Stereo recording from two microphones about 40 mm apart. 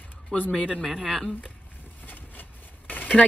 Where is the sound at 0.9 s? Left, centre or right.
Centre.